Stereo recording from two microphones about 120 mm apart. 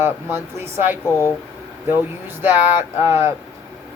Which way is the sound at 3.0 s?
20° right (ahead or behind).